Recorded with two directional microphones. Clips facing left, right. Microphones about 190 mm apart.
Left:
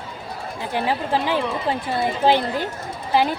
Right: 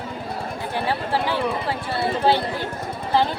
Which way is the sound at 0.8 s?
15° left (ahead or behind).